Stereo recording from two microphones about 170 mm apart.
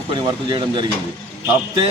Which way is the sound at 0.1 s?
30° right (ahead or behind).